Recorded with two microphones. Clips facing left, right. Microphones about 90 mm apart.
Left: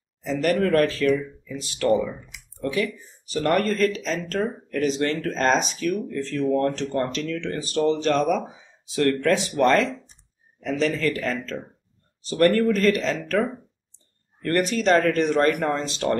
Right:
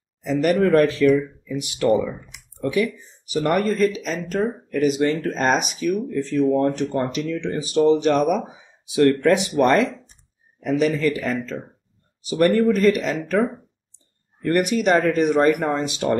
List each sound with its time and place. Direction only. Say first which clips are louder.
0.2 s speech: right 3 dB; 10° right (ahead or behind)
14.4 s speech: right 3 dB; 10° right (ahead or behind)